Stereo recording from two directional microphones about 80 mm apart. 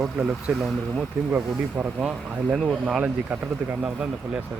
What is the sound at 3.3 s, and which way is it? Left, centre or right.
Speech, centre.